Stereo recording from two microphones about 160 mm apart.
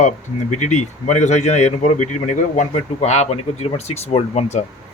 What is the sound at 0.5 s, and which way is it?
Speech, 50° left (ahead or behind).